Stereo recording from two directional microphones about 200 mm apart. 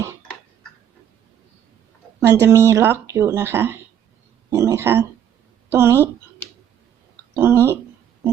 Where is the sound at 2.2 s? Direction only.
15° right (ahead or behind).